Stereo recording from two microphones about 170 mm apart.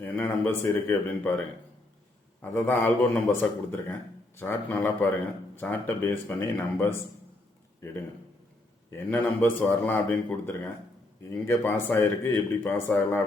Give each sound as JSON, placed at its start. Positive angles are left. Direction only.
{"t": 0.0, "sound": "speech", "side_deg": 10}
{"t": 9.0, "sound": "speech", "side_deg": 10}